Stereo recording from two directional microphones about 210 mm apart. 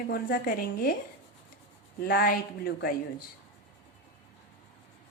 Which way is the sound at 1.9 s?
45° left (ahead or behind).